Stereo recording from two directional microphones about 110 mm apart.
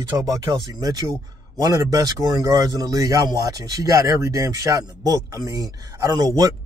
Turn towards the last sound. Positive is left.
turn(degrees=-35)  # may be behind; listen again after turning